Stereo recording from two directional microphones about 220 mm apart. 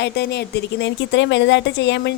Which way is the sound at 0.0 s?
50° left (ahead or behind).